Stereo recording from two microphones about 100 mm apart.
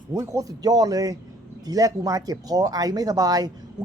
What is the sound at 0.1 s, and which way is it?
Speech, 35° right (ahead or behind).